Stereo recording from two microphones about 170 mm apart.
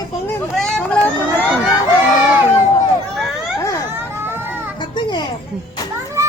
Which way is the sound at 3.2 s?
Centre (ahead or behind).